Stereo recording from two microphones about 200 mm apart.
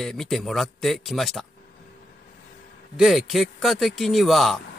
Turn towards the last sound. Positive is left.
turn(degrees=0)  # may be behind; listen again after turning